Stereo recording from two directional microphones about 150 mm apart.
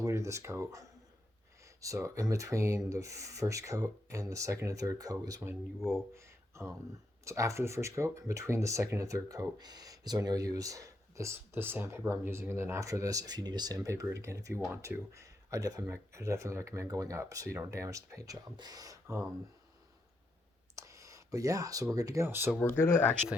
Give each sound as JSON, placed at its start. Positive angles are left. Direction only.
{"t": 0.0, "sound": "speech", "side_deg": -20}
{"t": 20.7, "sound": "speech", "side_deg": -20}
{"t": 22.6, "sound": "speech", "side_deg": 15}